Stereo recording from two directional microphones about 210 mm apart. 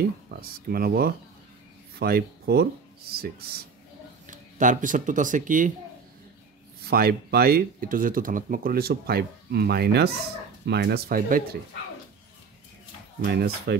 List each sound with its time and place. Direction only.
0.3 s speech: 45° right (ahead or behind)
6.8 s speech: 45° right (ahead or behind)
13.2 s speech: 50° right (ahead or behind)